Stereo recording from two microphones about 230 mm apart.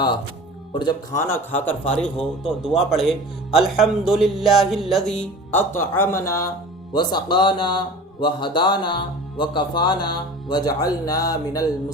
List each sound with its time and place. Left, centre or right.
0.7 s a man's voice: centre